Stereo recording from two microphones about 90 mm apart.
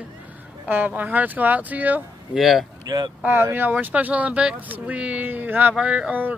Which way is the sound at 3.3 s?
25° right (ahead or behind).